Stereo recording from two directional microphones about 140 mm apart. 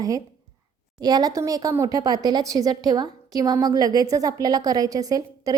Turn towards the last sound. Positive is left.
turn(degrees=-25)  # may be behind; listen again after turning